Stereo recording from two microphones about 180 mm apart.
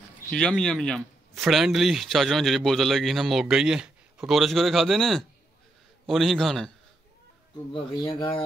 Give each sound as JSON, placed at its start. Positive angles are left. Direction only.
{"t": 0.3, "sound": "speech", "side_deg": 5}
{"t": 7.7, "sound": "speech", "side_deg": 25}